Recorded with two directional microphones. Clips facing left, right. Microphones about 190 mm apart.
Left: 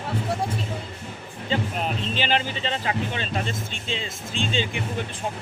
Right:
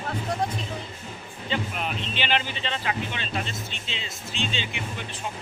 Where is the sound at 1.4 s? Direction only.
40° left (ahead or behind).